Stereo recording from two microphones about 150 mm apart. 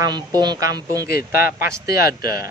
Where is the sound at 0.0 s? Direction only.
25° right (ahead or behind).